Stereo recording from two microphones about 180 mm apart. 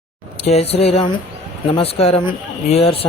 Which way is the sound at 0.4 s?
35° left (ahead or behind).